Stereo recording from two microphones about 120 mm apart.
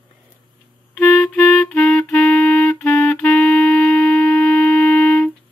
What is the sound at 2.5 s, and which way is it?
Clarinet, 20° left (ahead or behind).